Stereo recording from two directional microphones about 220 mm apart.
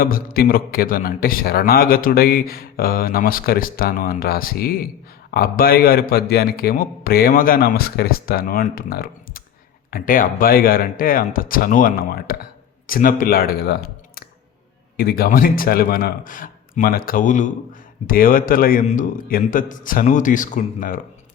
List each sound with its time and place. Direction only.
0.0 s a man's voice: 40° left (ahead or behind)